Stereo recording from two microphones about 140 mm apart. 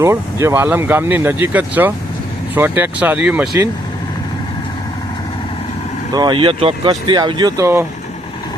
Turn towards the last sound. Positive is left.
turn(degrees=-20)  # may be behind; listen again after turning